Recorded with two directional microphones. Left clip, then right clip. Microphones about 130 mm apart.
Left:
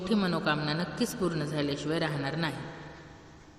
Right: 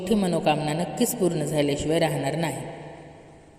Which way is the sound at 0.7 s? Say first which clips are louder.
Right 6 dB; 25° right (ahead or behind).